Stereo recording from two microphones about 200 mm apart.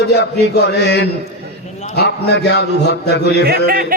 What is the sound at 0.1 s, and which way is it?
Music, 55° left (ahead or behind).